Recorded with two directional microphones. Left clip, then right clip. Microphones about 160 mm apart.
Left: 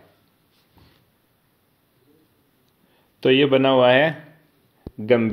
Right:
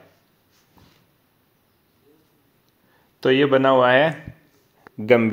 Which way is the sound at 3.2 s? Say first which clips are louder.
Even; 10° left (ahead or behind).